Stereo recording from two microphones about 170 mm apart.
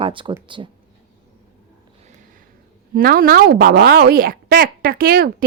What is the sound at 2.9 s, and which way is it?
A woman's voice, 60° right (ahead or behind).